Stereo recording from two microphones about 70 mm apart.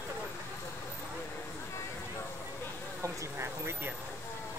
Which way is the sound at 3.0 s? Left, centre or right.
Right.